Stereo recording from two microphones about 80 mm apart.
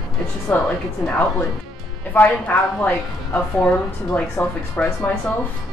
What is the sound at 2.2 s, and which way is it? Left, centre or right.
Speech, centre.